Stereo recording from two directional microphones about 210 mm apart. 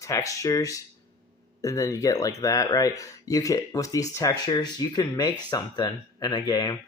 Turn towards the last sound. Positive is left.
turn(degrees=20)  # may be behind; listen again after turning